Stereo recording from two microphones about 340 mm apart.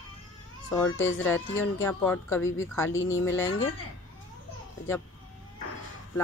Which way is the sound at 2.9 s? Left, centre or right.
Left.